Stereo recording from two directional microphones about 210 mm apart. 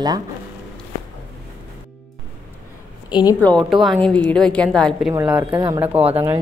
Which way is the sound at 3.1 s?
20° left (ahead or behind).